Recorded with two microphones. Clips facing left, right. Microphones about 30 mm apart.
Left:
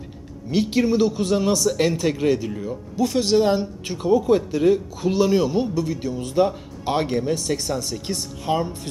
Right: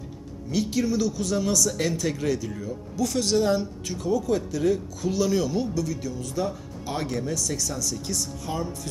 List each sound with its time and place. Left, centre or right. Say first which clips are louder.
0.5 s speech: left 5 dB; left